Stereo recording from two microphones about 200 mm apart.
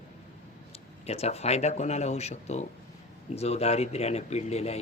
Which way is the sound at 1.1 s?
30° left (ahead or behind).